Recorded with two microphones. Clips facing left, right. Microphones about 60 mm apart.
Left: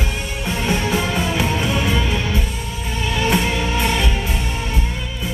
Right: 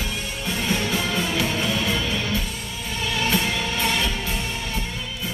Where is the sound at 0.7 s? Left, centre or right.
Left.